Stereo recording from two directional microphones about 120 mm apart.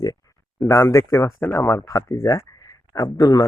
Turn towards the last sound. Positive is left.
turn(degrees=35)  # may be behind; listen again after turning